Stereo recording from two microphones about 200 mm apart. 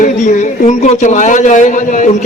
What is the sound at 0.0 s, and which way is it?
Speech, 40° left (ahead or behind).